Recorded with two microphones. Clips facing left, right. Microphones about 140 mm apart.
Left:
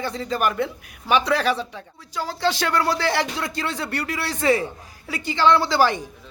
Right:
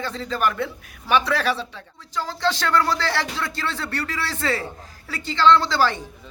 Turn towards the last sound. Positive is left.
turn(degrees=15)  # may be behind; listen again after turning